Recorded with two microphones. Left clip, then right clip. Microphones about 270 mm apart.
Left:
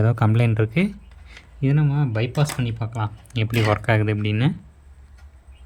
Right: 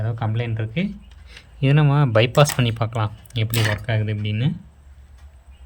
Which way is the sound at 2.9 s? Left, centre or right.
Centre.